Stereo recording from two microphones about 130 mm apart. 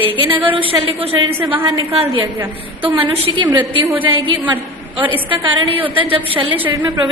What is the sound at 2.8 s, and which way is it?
A woman's voice, 40° right (ahead or behind).